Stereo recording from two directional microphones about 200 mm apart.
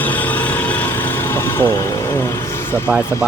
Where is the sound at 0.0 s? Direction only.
10° left (ahead or behind).